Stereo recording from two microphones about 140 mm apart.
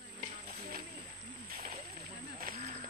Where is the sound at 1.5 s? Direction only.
90° right.